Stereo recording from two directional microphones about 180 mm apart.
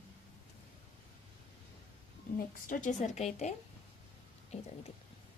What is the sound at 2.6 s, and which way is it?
Speech, 40° left (ahead or behind).